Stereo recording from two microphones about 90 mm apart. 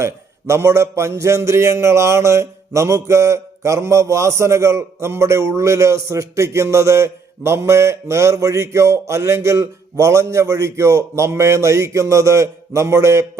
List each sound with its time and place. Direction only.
0.0 s a man's voice: 30° right (ahead or behind)